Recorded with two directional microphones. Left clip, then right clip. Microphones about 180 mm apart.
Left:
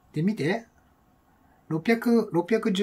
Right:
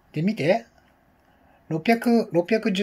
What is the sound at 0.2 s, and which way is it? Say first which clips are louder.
Speech: right 6 dB; 40° left (ahead or behind).